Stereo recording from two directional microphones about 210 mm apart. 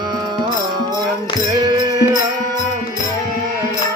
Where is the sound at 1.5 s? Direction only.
15° right (ahead or behind).